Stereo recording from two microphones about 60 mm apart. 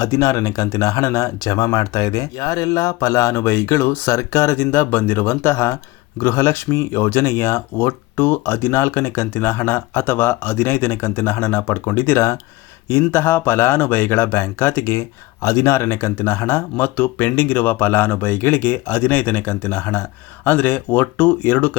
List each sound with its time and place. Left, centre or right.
0.0 s speech: left
4.5 s speech: left
15.4 s speech: left